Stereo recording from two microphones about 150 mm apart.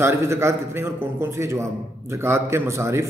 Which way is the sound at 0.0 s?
20° right (ahead or behind).